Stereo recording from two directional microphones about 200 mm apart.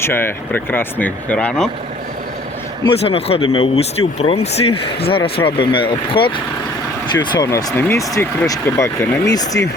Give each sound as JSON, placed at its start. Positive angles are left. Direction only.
{"t": 0.0, "sound": "speech", "side_deg": 10}
{"t": 2.8, "sound": "speech", "side_deg": 30}